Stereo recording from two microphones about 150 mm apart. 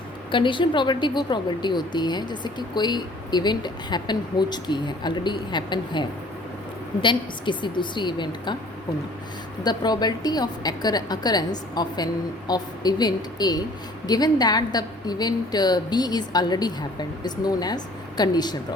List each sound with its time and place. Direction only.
0.3 s a woman's voice: 35° left (ahead or behind)
9.6 s a woman's voice: 25° left (ahead or behind)